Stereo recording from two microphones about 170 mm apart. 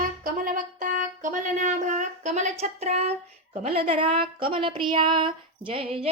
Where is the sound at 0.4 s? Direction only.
50° right (ahead or behind).